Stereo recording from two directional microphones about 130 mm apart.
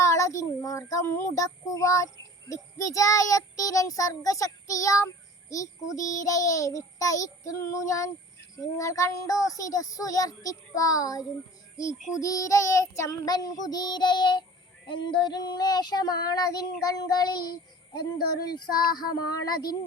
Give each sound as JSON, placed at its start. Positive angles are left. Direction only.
{"t": 0.0, "sound": "child singing", "side_deg": 25}
{"t": 11.8, "sound": "child singing", "side_deg": 75}
{"t": 12.2, "sound": "child singing", "side_deg": 25}
{"t": 18.5, "sound": "child singing", "side_deg": 30}